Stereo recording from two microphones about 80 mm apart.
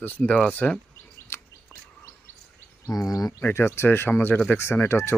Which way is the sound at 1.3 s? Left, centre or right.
Left.